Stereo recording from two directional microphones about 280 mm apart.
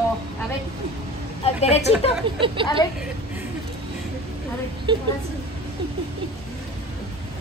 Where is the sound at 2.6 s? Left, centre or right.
Centre.